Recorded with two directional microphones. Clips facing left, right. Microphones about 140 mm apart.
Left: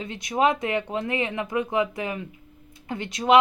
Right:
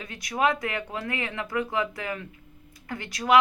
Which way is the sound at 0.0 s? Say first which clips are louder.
Left 3 dB; 25° left (ahead or behind).